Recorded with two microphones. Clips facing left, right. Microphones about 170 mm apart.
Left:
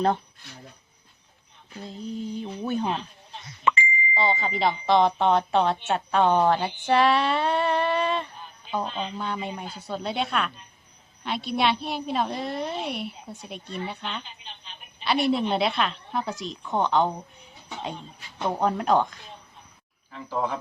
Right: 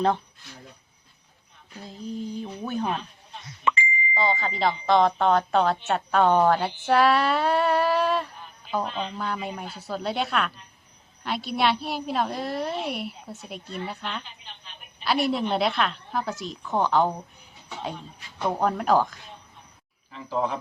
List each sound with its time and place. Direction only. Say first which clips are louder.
1.8 s speech: even; centre (ahead or behind)
3.6 s a sound: left 1 dB; 55° left (ahead or behind)
4.1 s speech: even; centre (ahead or behind)
18.4 s speech: even; 5° right (ahead or behind)
20.3 s speech: right 1 dB; centre (ahead or behind)